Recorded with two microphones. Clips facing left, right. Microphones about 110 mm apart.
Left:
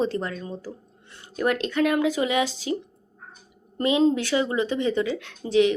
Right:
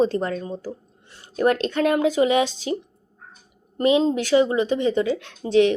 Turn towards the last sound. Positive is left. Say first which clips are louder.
# right 3 dB
turn(degrees=-30)  # may be behind; listen again after turning